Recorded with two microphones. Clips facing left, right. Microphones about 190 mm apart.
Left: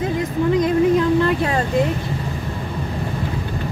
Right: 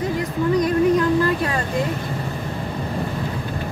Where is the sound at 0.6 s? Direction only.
25° left (ahead or behind).